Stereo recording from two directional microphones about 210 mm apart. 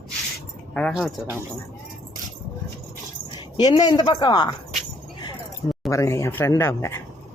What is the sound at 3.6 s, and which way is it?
Speech, 20° left (ahead or behind).